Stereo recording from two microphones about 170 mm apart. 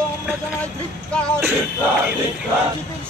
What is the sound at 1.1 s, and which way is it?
Speech, 5° left (ahead or behind).